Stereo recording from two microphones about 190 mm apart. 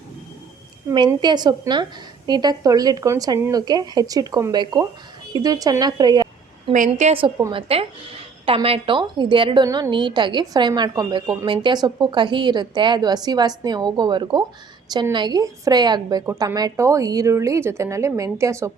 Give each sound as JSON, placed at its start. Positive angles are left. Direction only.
{"t": 0.9, "sound": "a woman's voice", "side_deg": -25}
{"t": 6.7, "sound": "a woman's voice", "side_deg": -40}